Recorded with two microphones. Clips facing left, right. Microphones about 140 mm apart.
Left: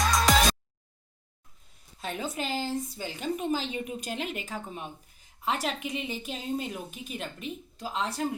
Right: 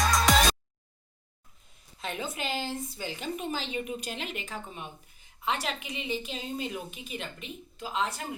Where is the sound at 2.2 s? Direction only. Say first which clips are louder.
Left 2 dB; 40° left (ahead or behind).